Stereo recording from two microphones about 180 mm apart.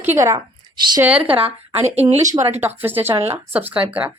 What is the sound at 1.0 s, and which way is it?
Speech, 10° right (ahead or behind).